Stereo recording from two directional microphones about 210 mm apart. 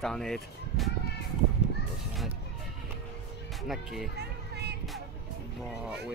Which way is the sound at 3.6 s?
Centre (ahead or behind).